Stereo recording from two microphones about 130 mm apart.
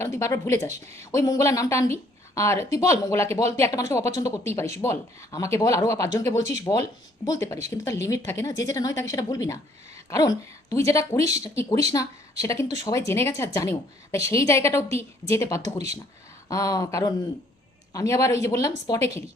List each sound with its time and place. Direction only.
0.0 s speech: 20° left (ahead or behind)